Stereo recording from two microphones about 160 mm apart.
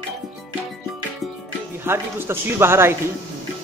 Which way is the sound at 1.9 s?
15° right (ahead or behind).